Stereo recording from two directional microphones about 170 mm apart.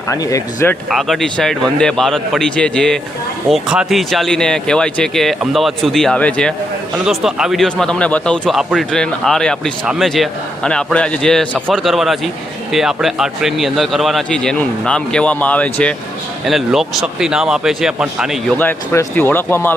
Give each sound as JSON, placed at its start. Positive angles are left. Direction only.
{"t": 0.1, "sound": "speech", "side_deg": 20}
{"t": 0.9, "sound": "speech", "side_deg": 0}
{"t": 18.6, "sound": "speech", "side_deg": 10}